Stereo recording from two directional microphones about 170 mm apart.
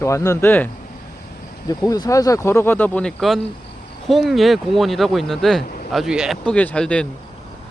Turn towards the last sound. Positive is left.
turn(degrees=5)  # may be behind; listen again after turning